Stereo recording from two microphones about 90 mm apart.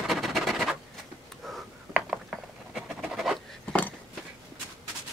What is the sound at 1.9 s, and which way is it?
Writing, 10° right (ahead or behind).